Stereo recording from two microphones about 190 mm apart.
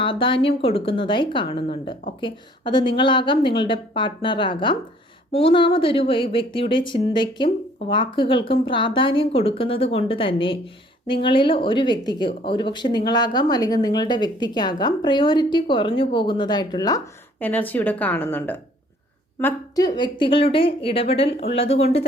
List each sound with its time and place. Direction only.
0.0 s speech: 25° left (ahead or behind)
17.4 s a woman's voice: 10° left (ahead or behind); by 21.8 s 30° left (ahead or behind)